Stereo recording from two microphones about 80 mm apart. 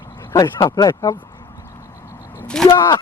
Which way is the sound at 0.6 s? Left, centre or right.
Left.